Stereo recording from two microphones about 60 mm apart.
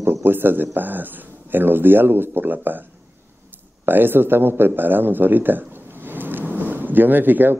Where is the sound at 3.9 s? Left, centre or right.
Right.